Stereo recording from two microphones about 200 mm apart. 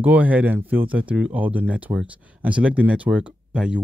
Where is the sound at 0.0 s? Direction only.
5° right (ahead or behind).